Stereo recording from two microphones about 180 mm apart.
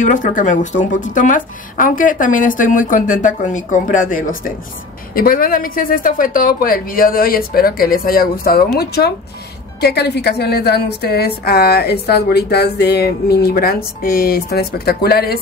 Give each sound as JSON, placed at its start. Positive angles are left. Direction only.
{"t": 0.0, "sound": "a woman's voice", "side_deg": 45}